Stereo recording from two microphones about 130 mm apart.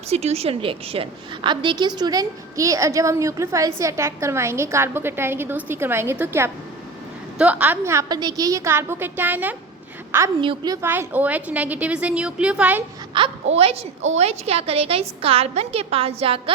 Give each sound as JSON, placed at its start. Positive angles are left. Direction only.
{"t": 0.1, "sound": "a woman's voice", "side_deg": -55}
{"t": 8.1, "sound": "a woman's voice", "side_deg": -30}
{"t": 10.4, "sound": "a woman's voice", "side_deg": -35}
{"t": 10.8, "sound": "a woman's voice", "side_deg": -15}
{"t": 13.1, "sound": "a woman's voice", "side_deg": -45}